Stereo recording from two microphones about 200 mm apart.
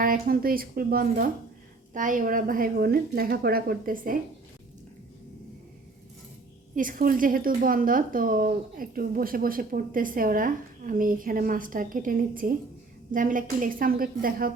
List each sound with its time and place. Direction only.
0.0 s a woman's voice: 45° right (ahead or behind)
6.7 s a woman's voice: 45° right (ahead or behind)